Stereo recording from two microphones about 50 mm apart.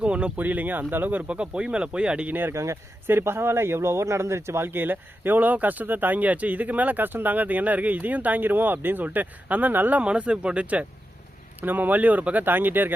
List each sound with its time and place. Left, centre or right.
0.0 s speech: right
1.3 s speech: right
2.5 s speech: right
3.1 s speech: right
10.0 s speech: right
11.6 s speech: right